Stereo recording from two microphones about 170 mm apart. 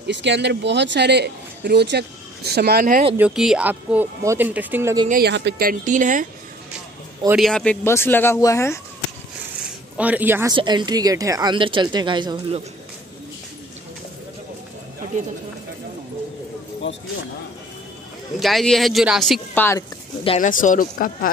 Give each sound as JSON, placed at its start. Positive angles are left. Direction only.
{"t": 0.0, "sound": "speech", "side_deg": -90}
{"t": 3.2, "sound": "speech", "side_deg": -5}
{"t": 5.2, "sound": "speech", "side_deg": -90}
{"t": 7.3, "sound": "speech", "side_deg": 5}
{"t": 9.9, "sound": "speech", "side_deg": -10}
{"t": 10.5, "sound": "a woman's voice", "side_deg": -25}
{"t": 18.4, "sound": "speech", "side_deg": 0}
{"t": 19.5, "sound": "speech", "side_deg": 10}
{"t": 20.3, "sound": "speech", "side_deg": 50}